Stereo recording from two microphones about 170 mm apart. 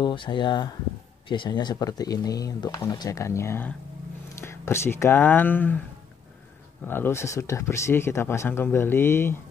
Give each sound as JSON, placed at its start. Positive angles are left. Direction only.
{"t": 0.0, "sound": "speech", "side_deg": 30}
{"t": 6.9, "sound": "speech", "side_deg": 15}